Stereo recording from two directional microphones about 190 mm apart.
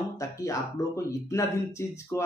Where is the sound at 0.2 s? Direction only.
15° left (ahead or behind).